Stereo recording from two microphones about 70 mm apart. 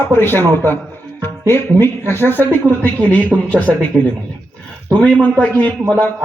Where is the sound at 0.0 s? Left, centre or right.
Left.